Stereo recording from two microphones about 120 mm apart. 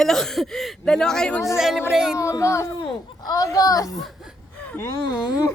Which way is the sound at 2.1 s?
25° left (ahead or behind).